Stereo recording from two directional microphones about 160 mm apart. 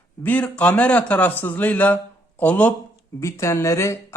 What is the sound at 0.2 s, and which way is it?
Speech, 10° left (ahead or behind).